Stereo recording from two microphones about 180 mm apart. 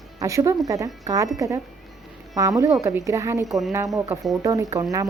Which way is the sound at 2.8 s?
15° right (ahead or behind).